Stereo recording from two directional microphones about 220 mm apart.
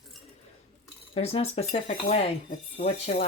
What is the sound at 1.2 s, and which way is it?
Speech, 30° left (ahead or behind).